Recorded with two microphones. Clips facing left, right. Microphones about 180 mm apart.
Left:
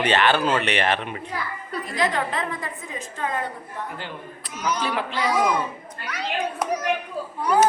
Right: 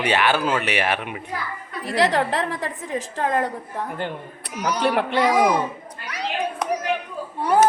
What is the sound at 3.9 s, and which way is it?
A woman's voice, 55° right (ahead or behind).